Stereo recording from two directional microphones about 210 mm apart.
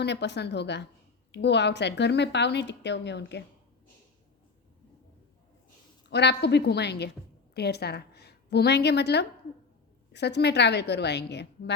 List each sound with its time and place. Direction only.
0.0 s a woman's voice: 55° left (ahead or behind)
6.1 s a woman's voice: 55° left (ahead or behind)